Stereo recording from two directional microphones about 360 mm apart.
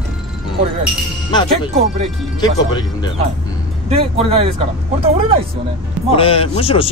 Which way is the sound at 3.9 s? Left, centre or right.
Centre.